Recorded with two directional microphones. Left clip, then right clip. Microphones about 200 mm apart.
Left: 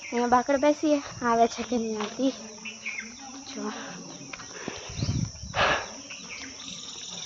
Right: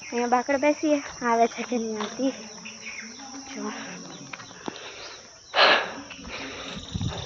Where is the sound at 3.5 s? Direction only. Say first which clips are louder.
Right 1 dB; 10° left (ahead or behind).